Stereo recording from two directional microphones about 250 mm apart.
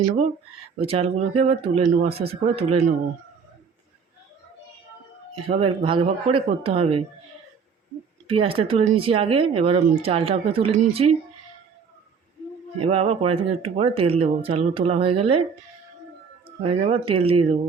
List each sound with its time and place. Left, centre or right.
0.8 s speech: right
5.5 s speech: right
8.3 s speech: right
12.8 s speech: right
16.6 s speech: right